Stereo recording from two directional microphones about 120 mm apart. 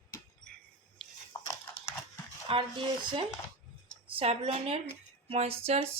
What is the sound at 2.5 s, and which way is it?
Speech, 45° right (ahead or behind).